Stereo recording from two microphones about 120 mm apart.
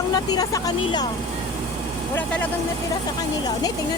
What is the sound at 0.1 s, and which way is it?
Speech, 30° left (ahead or behind).